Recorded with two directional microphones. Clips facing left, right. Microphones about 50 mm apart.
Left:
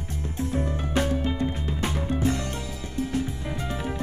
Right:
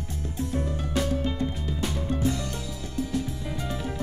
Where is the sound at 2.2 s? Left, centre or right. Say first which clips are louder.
Left 2 dB; left.